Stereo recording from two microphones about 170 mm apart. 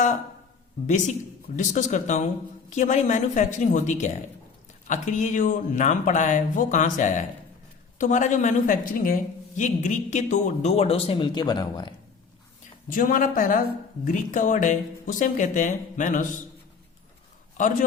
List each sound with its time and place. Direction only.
0.9 s a woman's voice: 45° left (ahead or behind); by 11.9 s 25° left (ahead or behind)
12.9 s speech: 55° left (ahead or behind)
17.6 s speech: 50° left (ahead or behind)